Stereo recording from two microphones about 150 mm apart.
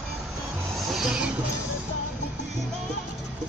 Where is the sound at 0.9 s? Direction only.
5° right (ahead or behind).